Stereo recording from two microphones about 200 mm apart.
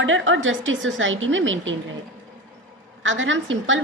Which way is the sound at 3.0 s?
70° right (ahead or behind).